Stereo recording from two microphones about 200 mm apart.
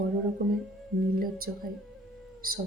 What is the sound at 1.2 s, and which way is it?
Speech, 45° right (ahead or behind).